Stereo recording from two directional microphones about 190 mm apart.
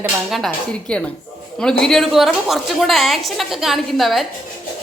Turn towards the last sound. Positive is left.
turn(degrees=0)  # may be behind; listen again after turning